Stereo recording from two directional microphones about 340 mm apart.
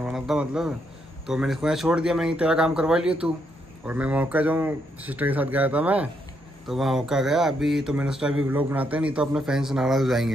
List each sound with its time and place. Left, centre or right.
0.0 s cricket: centre
1.2 s speech: centre